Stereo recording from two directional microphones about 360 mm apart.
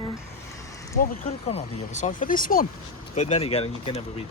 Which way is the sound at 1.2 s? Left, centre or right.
Centre.